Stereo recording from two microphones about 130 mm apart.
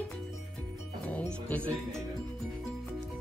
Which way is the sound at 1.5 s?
10° left (ahead or behind).